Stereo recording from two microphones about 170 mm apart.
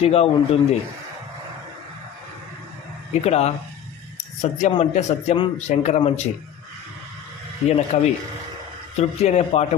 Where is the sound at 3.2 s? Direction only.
40° left (ahead or behind).